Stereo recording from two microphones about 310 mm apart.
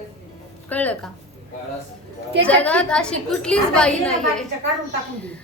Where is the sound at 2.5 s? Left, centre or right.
Centre.